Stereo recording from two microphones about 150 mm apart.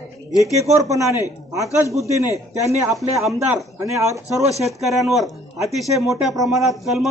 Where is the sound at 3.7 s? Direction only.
20° right (ahead or behind).